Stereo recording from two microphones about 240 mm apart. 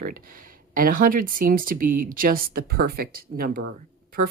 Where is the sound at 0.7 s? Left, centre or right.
Right.